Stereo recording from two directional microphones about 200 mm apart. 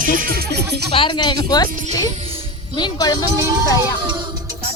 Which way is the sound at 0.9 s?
25° left (ahead or behind).